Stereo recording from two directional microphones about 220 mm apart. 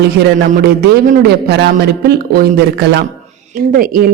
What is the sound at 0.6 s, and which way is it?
A man's voice, 45° right (ahead or behind).